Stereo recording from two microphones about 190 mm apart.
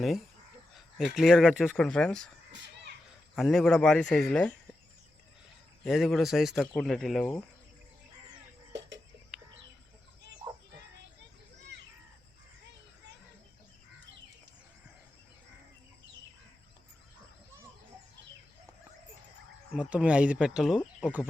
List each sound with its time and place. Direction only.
0.7 s speech: centre (ahead or behind)
2.5 s a sound: 70° right (ahead or behind)
3.3 s speech: centre (ahead or behind)
5.8 s speech: centre (ahead or behind)
19.7 s speech: 5° right (ahead or behind)